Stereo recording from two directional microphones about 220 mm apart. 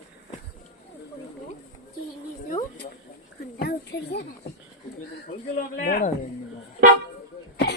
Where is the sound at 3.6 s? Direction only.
50° left (ahead or behind).